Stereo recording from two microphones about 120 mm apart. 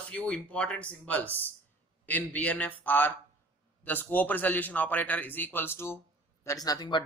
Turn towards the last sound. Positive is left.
turn(degrees=35)  # may be behind; listen again after turning